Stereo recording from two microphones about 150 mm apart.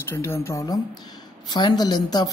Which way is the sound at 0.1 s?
15° left (ahead or behind).